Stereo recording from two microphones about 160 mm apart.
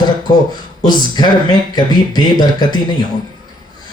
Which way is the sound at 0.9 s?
25° left (ahead or behind).